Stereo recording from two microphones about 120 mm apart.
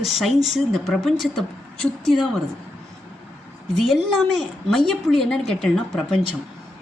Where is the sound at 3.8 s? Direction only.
Centre (ahead or behind).